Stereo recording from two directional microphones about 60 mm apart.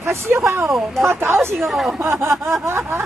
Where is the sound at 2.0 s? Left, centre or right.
Right.